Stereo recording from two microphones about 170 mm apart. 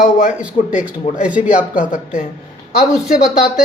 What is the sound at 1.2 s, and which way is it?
Speech, 10° right (ahead or behind).